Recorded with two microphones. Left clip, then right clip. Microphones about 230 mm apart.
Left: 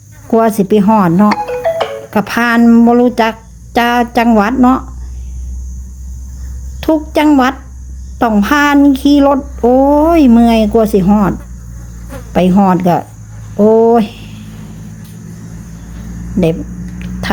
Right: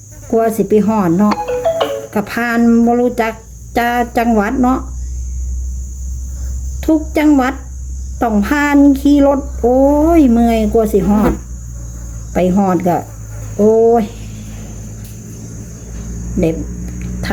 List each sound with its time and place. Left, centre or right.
0.3 s speech: left
1.4 s music: centre
2.0 s speech: left
6.7 s speech: left
12.3 s speech: left